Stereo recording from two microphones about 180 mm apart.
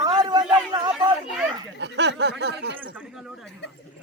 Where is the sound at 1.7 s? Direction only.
70° right (ahead or behind).